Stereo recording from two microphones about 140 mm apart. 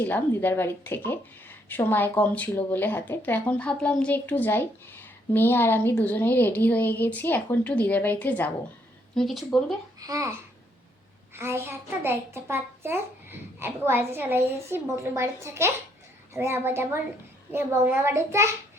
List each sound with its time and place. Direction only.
0.0 s a woman's voice: 15° left (ahead or behind)
9.1 s speech: centre (ahead or behind)
10.0 s a child's voice: 25° right (ahead or behind)
11.3 s a woman's voice: 15° right (ahead or behind)